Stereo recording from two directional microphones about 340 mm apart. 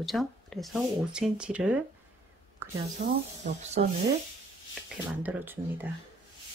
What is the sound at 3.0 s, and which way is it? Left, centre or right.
Speech, right.